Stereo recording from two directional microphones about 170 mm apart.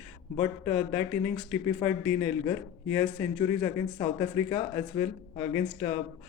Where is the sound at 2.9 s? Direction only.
20° left (ahead or behind).